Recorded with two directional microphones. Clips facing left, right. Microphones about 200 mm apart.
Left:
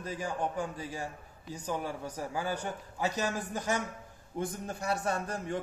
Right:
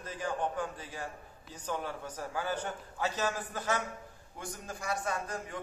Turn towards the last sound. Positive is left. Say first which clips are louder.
# left 4 dB
turn(degrees=30)  # may be behind; listen again after turning